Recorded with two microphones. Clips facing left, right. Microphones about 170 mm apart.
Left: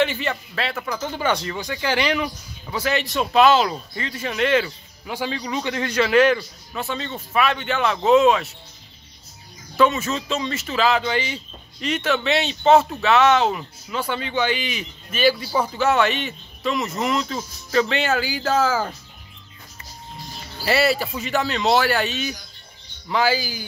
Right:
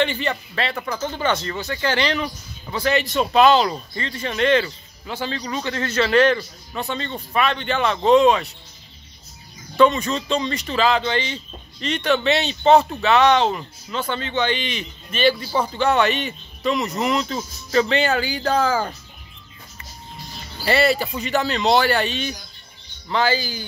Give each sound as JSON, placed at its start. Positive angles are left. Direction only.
{"t": 0.0, "sound": "speech", "side_deg": 5}
{"t": 9.8, "sound": "speech", "side_deg": 5}
{"t": 20.6, "sound": "speech", "side_deg": 0}